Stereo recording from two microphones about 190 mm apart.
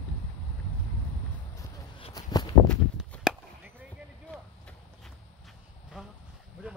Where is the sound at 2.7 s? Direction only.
5° right (ahead or behind).